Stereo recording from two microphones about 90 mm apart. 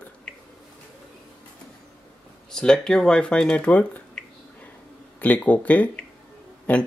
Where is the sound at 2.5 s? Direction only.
10° left (ahead or behind).